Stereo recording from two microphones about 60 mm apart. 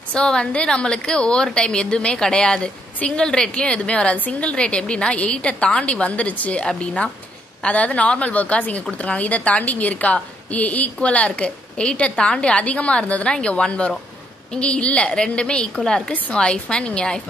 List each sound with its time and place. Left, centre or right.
0.1 s a woman's voice: centre